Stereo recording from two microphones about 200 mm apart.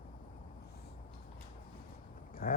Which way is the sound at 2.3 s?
45° left (ahead or behind).